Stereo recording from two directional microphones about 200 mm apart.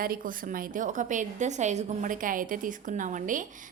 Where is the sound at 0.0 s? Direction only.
45° right (ahead or behind).